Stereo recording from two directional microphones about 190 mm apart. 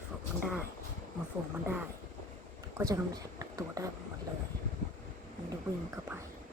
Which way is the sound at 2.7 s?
15° right (ahead or behind).